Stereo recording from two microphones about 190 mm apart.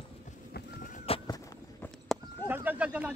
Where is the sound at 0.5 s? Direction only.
45° left (ahead or behind).